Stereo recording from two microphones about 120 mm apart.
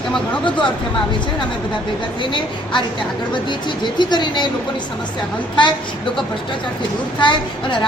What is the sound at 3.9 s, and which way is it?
Speech, 40° left (ahead or behind).